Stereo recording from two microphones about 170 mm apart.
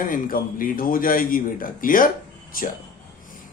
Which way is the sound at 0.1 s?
55° left (ahead or behind).